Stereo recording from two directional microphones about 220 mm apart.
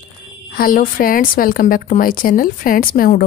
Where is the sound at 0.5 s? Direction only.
40° left (ahead or behind).